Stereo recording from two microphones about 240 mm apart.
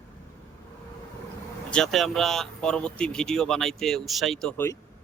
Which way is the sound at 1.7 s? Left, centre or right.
Centre.